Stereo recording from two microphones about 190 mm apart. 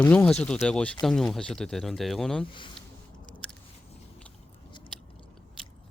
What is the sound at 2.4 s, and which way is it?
Speech, 25° left (ahead or behind).